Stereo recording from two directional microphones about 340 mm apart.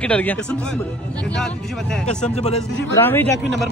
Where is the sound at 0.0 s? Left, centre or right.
Centre.